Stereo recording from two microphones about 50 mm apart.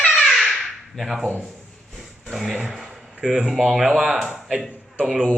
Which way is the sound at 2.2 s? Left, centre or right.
Centre.